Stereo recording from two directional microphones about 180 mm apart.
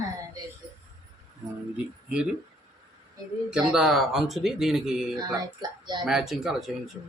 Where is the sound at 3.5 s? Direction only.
5° right (ahead or behind).